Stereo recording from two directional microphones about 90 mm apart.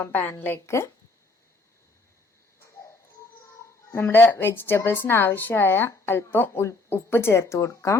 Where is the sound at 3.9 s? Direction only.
25° left (ahead or behind).